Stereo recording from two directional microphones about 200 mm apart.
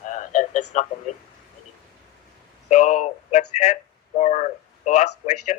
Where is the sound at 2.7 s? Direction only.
40° left (ahead or behind).